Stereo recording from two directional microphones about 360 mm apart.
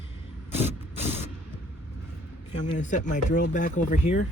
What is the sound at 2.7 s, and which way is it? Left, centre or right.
Speech, left.